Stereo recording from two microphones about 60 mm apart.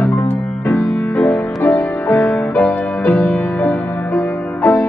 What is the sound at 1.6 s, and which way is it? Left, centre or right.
Music, left.